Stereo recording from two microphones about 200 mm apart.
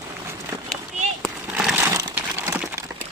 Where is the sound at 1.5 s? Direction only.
5° right (ahead or behind).